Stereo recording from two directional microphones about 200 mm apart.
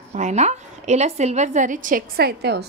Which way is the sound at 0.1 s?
35° right (ahead or behind).